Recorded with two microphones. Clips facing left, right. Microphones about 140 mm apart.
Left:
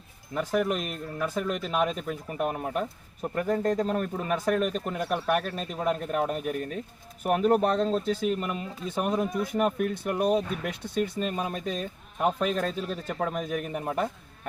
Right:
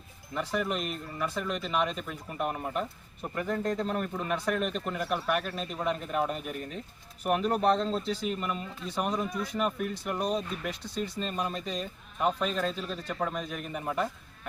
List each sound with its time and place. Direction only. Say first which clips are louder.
0.3 s speech: left 4 dB; 50° left (ahead or behind)